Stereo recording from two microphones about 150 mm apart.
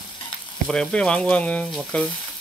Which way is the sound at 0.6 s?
5° left (ahead or behind).